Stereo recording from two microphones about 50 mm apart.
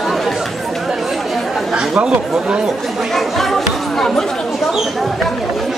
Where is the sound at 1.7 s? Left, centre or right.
Centre.